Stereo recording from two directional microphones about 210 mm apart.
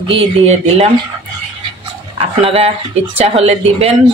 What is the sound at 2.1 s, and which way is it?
Speech, 25° right (ahead or behind).